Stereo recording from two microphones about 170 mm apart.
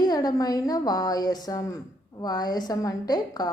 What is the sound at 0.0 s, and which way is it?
A woman's voice, 25° left (ahead or behind).